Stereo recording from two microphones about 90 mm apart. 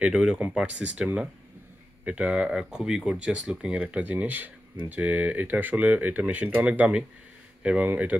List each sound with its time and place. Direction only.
0.0 s speech: 5° right (ahead or behind)